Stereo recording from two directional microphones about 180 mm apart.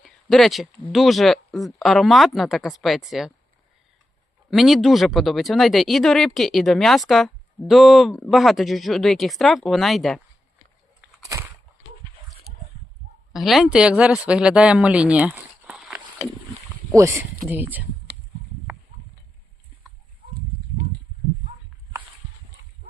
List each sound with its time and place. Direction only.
0.0 s speech: centre (ahead or behind)
4.5 s speech: centre (ahead or behind)
11.2 s a sound: 20° right (ahead or behind)
13.3 s speech: centre (ahead or behind)
16.9 s speech: 15° right (ahead or behind)